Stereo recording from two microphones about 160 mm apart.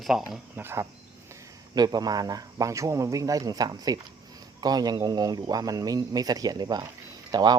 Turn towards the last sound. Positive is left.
turn(degrees=-25)  # may be behind; listen again after turning